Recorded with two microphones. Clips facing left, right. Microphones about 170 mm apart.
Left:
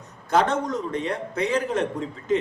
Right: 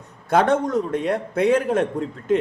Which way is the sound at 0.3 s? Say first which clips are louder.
Right 4 dB; 55° right (ahead or behind).